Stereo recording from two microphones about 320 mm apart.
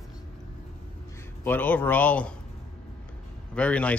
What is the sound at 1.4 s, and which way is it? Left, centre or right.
Speech, centre.